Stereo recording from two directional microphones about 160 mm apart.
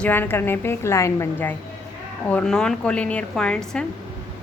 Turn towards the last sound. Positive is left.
turn(degrees=5)  # may be behind; listen again after turning